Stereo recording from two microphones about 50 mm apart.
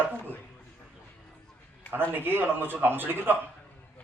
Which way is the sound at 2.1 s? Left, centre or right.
Right.